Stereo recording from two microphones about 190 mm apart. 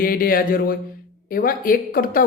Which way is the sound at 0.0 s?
50° left (ahead or behind).